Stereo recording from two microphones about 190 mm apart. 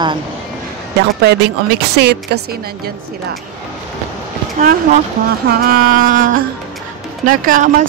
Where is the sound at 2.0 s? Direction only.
60° right (ahead or behind).